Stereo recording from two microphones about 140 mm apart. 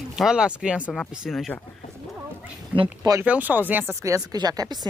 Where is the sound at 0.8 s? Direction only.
5° left (ahead or behind).